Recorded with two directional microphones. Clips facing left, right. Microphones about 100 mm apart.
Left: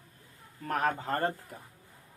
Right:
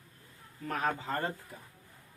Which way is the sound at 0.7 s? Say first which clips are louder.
Left 3 dB; 50° left (ahead or behind).